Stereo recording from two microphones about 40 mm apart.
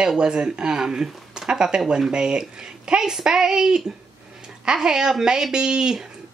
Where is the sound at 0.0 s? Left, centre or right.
Centre.